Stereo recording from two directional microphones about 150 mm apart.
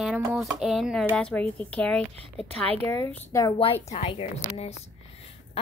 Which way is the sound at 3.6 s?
40° left (ahead or behind).